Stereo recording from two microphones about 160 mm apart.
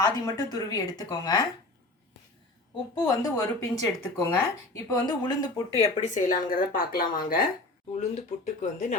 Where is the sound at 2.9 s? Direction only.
20° left (ahead or behind).